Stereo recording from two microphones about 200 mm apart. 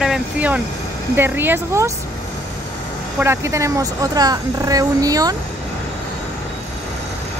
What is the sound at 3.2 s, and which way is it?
Speech, 15° right (ahead or behind).